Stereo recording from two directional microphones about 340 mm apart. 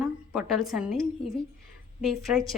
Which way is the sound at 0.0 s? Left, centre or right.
Centre.